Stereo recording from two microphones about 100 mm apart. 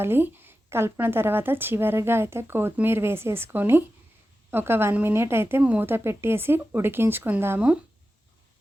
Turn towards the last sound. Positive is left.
turn(degrees=-20)  # may be behind; listen again after turning